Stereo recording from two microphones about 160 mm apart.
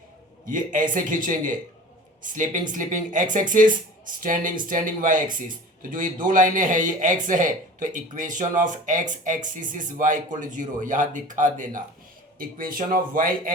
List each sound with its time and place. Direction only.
0.4 s speech: 55° right (ahead or behind)